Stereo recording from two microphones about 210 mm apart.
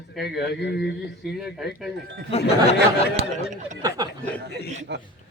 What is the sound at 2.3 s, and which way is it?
Speech, 30° left (ahead or behind).